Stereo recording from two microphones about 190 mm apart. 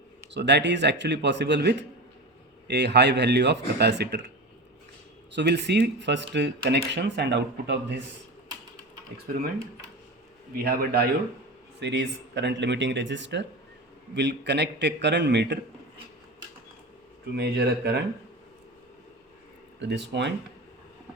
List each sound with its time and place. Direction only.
0.3 s speech: 65° right (ahead or behind)
5.3 s speech: 65° right (ahead or behind)
10.5 s speech: 50° right (ahead or behind)
17.3 s speech: 60° right (ahead or behind)
19.8 s speech: 65° right (ahead or behind)